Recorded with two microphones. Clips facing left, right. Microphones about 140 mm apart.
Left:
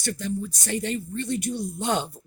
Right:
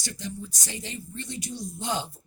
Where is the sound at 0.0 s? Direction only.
55° left (ahead or behind).